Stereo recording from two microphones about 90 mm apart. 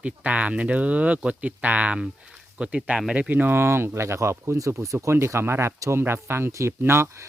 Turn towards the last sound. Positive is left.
turn(degrees=-30)  # may be behind; listen again after turning